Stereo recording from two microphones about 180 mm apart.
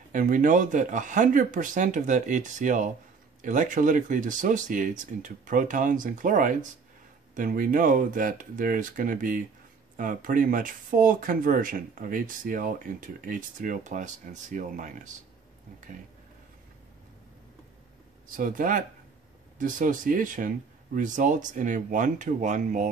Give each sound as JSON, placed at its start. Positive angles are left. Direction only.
{"t": 0.1, "sound": "speech", "side_deg": -45}
{"t": 18.3, "sound": "speech", "side_deg": -50}